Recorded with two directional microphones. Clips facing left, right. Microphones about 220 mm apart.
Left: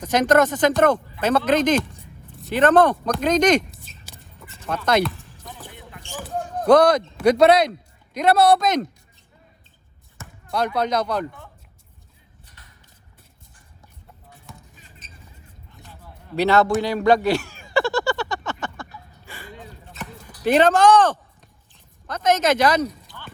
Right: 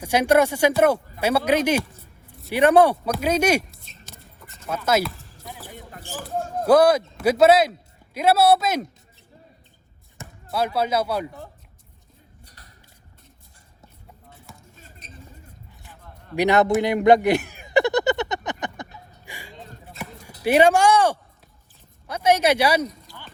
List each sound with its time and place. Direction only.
0.0 s speech: 10° right (ahead or behind)
3.9 s a sound: 5° left (ahead or behind)
4.7 s speech: 5° right (ahead or behind)
5.4 s basketball bounce: centre (ahead or behind)
6.5 s speech: 5° right (ahead or behind)
10.5 s speech: 5° right (ahead or behind)
11.3 s speech: 35° right (ahead or behind)
12.5 s music: 40° right (ahead or behind)
15.7 s a sound: 15° right (ahead or behind)
20.4 s speech: 10° right (ahead or behind)